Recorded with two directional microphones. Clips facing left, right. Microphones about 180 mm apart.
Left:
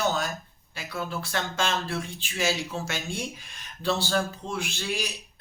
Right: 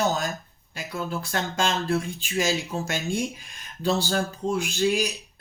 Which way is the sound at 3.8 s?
45° right (ahead or behind).